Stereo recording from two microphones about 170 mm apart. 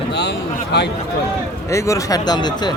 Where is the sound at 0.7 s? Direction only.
80° left.